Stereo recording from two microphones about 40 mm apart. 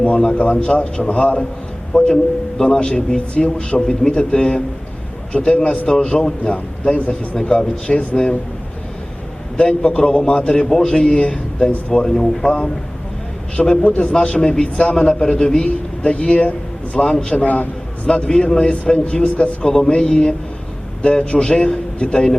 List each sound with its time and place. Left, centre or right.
0.5 s a man's voice: left
9.6 s a man's voice: left
12.0 s speech: centre
12.5 s a man's voice: left
13.8 s a man's voice: left
17.4 s a man's voice: left
18.1 s a man's voice: left
19.6 s a man's voice: left
21.9 s speech: left